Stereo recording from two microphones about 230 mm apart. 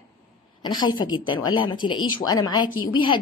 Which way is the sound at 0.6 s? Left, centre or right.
Centre.